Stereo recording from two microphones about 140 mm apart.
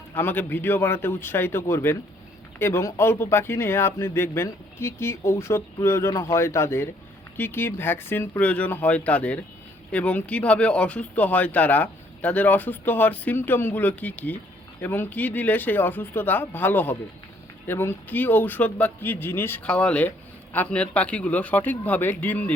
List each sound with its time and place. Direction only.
0.1 s speech: 15° left (ahead or behind)